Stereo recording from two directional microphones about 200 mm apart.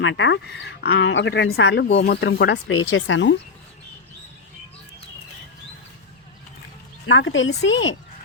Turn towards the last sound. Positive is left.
turn(degrees=70)  # may be behind; listen again after turning